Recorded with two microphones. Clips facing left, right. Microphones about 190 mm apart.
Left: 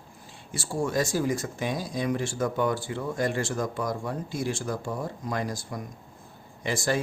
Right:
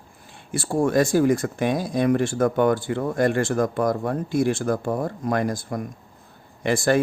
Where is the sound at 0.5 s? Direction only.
55° right (ahead or behind).